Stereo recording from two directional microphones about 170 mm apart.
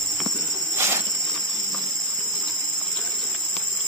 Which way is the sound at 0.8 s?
15° right (ahead or behind).